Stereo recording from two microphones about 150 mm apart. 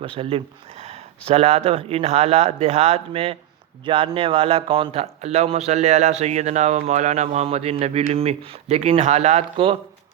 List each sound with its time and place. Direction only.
0.0 s speech: 35° right (ahead or behind)